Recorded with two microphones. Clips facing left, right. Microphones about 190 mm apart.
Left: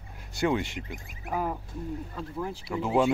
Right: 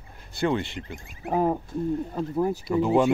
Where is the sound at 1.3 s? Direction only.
30° right (ahead or behind).